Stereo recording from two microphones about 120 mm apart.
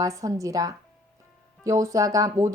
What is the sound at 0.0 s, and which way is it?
Speech, 30° right (ahead or behind).